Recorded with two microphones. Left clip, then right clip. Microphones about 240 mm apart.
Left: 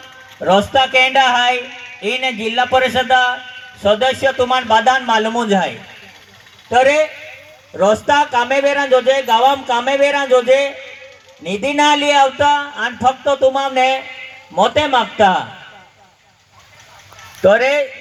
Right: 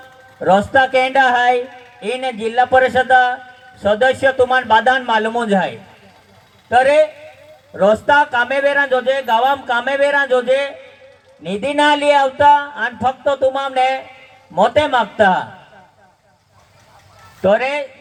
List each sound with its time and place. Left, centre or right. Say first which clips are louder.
0.4 s speech: even; left
17.4 s speech: left 3 dB; left